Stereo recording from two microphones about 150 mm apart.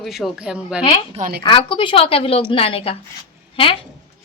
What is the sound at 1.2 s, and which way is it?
Speech, 70° right (ahead or behind).